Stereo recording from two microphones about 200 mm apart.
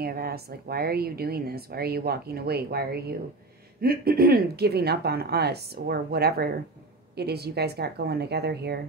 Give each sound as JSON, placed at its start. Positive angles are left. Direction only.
{"t": 0.0, "sound": "speech", "side_deg": -50}